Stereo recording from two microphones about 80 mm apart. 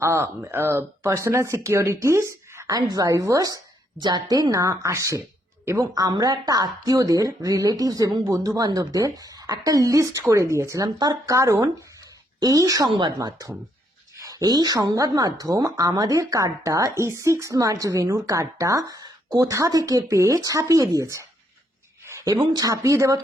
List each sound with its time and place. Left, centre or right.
0.0 s speech: right
4.0 s speech: right
5.9 s speech: right
10.9 s speech: right
11.3 s speech: right
12.9 s speech: right
13.1 s speech: right
22.0 s a sound: right
22.3 s speech: right
22.7 s speech: right